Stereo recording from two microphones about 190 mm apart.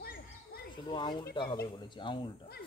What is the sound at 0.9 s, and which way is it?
Speech, 25° left (ahead or behind).